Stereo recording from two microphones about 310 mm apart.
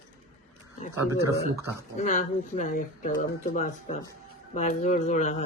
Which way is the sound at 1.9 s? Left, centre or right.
Left.